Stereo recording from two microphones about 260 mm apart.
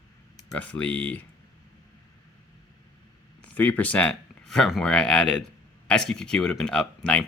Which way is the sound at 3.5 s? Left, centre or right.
Centre.